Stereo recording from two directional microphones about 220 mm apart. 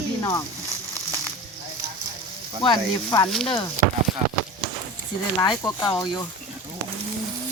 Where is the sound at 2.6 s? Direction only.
20° left (ahead or behind).